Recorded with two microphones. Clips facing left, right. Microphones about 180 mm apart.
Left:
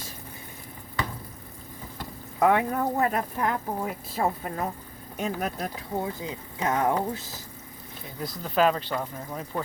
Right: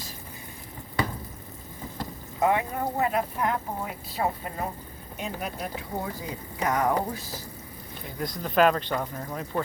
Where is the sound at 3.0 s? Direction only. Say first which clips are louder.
Even; 45° left (ahead or behind).